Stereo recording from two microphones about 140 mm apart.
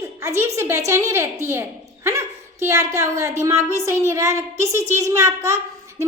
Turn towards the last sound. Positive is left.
turn(degrees=-20)  # may be behind; listen again after turning